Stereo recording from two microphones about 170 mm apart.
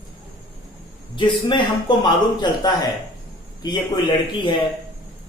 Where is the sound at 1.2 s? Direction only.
30° left (ahead or behind).